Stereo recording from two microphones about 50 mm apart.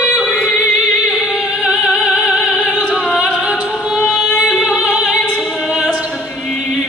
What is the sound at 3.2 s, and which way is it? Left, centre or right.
Music, centre.